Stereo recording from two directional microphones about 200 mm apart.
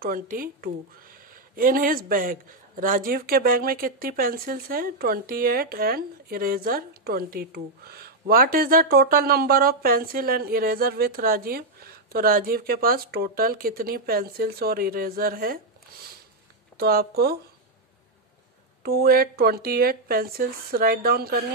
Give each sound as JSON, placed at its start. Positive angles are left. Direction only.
{"t": 0.0, "sound": "speech", "side_deg": -45}
{"t": 18.8, "sound": "speech", "side_deg": -50}